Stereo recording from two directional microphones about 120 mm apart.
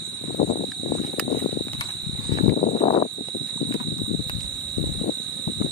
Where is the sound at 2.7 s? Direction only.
70° left (ahead or behind).